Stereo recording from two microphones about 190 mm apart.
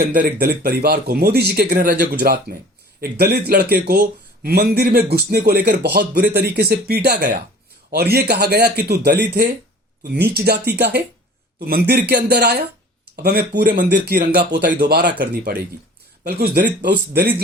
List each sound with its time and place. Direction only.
0.0 s speech: 50° right (ahead or behind)
16.2 s speech: 55° right (ahead or behind)